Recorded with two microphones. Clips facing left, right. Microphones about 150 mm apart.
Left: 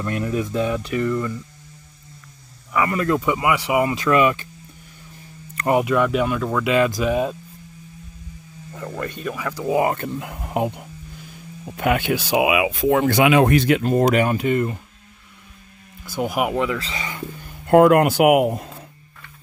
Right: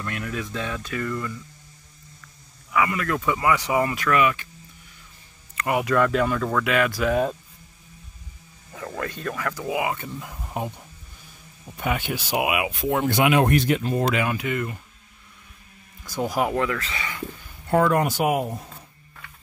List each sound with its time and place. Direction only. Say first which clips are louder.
0.1 s speech: left 9 dB; 25° left (ahead or behind)
3.1 s speech: left 3 dB; 20° left (ahead or behind)
5.6 s speech: left 5 dB; 30° left (ahead or behind)
5.9 s speech: left 2 dB; 10° left (ahead or behind)
6.6 s speech: left 6 dB; 20° left (ahead or behind)
8.7 s speech: left 2 dB; 5° left (ahead or behind)
9.7 s speech: left 7 dB; 40° left (ahead or behind)
9.9 s speech: left 7 dB; 65° left (ahead or behind)
11.6 s speech: left 6 dB; 90° left
13.8 s speech: left 6 dB; 45° left (ahead or behind); by 14.8 s 30° left (ahead or behind)
16.0 s speech: left 2 dB; 5° left (ahead or behind)
16.3 s speech: left 2 dB; 15° left (ahead or behind)
17.6 s speech: left 7 dB; 70° left (ahead or behind)